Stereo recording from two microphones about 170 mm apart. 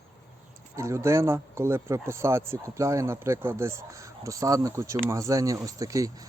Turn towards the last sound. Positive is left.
turn(degrees=-20)  # may be behind; listen again after turning